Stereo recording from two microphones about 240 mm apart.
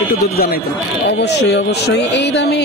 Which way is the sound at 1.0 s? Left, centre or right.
Left.